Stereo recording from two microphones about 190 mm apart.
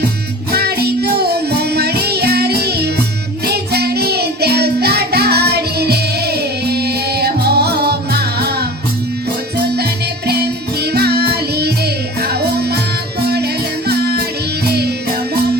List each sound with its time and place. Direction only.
0.5 s music: 55° right (ahead or behind)
9.7 s music: 60° right (ahead or behind)